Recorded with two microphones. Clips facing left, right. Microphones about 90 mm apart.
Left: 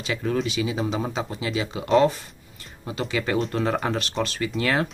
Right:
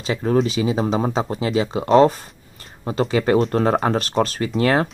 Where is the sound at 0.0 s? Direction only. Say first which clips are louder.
Right 6 dB; 35° right (ahead or behind).